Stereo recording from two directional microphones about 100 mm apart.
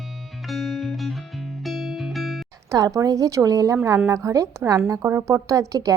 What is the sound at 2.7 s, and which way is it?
A woman's voice, 35° right (ahead or behind).